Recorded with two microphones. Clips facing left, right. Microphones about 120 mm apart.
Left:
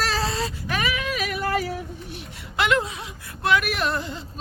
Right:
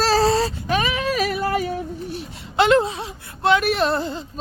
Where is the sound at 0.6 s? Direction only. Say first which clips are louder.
Right 5 dB; 25° right (ahead or behind).